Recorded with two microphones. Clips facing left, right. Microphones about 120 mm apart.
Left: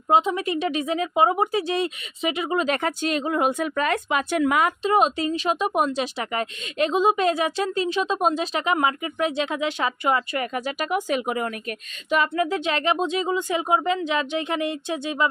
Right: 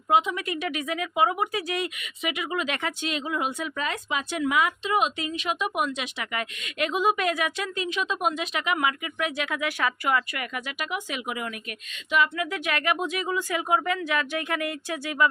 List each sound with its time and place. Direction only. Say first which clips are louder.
0.1 s speech: left 3 dB; 30° left (ahead or behind)